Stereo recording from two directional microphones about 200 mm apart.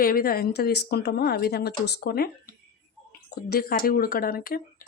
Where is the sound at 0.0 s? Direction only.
50° left (ahead or behind).